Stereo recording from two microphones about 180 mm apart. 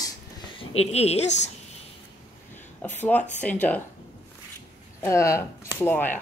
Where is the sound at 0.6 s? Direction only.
35° left (ahead or behind).